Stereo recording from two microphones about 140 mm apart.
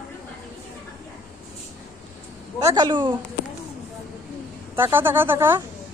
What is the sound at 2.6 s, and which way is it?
Speech, 30° right (ahead or behind).